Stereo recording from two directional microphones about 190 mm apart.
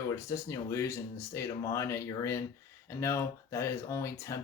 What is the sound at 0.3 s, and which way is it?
Speech, 15° left (ahead or behind).